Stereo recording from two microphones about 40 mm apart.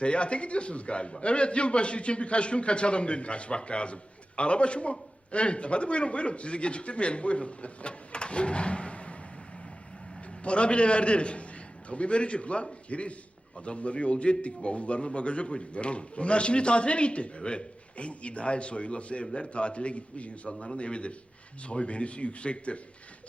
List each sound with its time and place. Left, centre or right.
0.0 s a man's voice: left
10.4 s a man's voice: left